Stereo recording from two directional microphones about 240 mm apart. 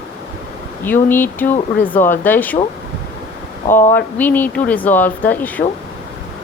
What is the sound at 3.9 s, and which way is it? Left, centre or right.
Speech, centre.